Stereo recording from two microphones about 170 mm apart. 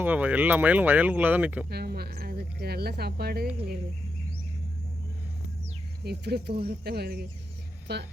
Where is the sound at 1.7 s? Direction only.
70° right (ahead or behind).